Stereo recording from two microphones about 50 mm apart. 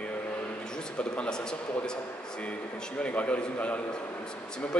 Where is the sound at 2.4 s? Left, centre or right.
Left.